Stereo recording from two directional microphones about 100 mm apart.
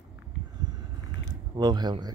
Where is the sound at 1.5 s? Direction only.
45° right (ahead or behind).